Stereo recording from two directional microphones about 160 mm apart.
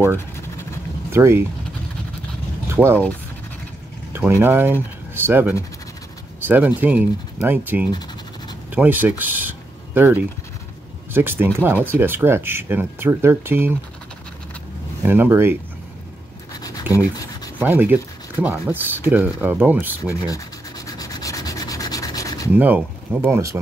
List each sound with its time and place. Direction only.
1.1 s speech: 15° right (ahead or behind)
2.7 s speech: 15° right (ahead or behind)
4.1 s speech: 15° right (ahead or behind)
15.0 s speech: 15° right (ahead or behind)
16.9 s speech: 10° right (ahead or behind)
17.6 s rub: 10° right (ahead or behind)
18.7 s speech: 10° right (ahead or behind)
20.2 s rub: 20° left (ahead or behind)
22.6 s speech: 10° right (ahead or behind)